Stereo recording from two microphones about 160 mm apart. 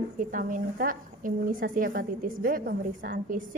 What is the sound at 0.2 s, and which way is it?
A woman's voice, 55° right (ahead or behind).